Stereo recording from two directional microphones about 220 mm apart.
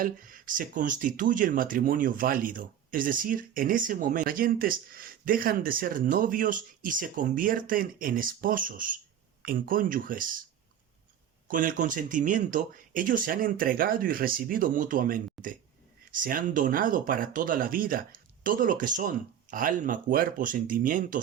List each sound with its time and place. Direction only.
0.0 s speech: 40° right (ahead or behind)
11.4 s speech: 40° right (ahead or behind)